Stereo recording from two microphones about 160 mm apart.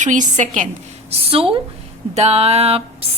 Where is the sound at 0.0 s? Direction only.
50° right (ahead or behind).